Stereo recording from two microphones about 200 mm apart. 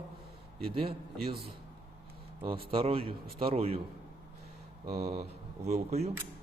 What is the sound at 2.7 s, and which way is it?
A man's voice, 25° right (ahead or behind).